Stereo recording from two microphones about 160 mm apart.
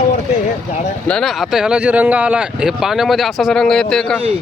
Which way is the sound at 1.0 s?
5° left (ahead or behind).